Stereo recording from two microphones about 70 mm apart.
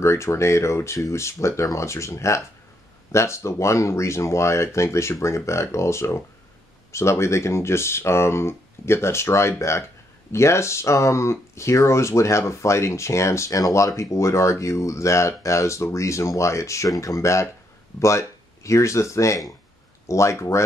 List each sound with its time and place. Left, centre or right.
0.0 s speech: left